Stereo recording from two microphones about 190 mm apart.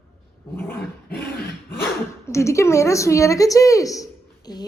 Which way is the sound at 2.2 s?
15° left (ahead or behind).